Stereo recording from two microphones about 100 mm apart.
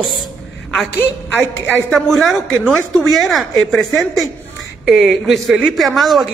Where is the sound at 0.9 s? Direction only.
20° left (ahead or behind).